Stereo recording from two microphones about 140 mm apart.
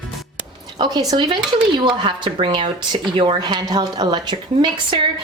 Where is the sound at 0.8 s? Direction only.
30° right (ahead or behind).